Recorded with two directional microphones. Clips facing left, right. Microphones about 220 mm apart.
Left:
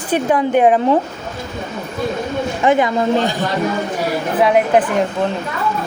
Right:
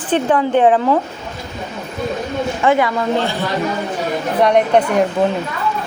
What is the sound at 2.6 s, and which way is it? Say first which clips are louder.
Speech: left 1 dB; 20° left (ahead or behind).